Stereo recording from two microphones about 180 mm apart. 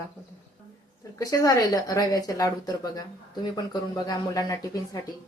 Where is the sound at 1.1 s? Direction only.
20° left (ahead or behind).